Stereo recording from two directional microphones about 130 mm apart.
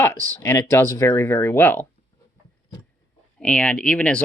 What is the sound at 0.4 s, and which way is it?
Speech, 20° left (ahead or behind).